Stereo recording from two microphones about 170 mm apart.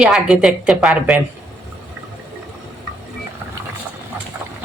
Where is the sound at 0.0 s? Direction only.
5° right (ahead or behind).